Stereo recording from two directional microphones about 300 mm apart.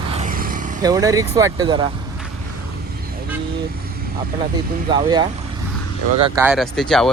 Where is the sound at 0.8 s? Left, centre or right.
Centre.